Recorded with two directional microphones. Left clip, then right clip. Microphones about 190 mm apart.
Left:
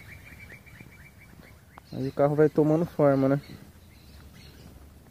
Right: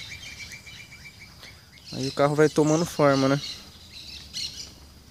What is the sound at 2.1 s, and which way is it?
Speech, 10° right (ahead or behind).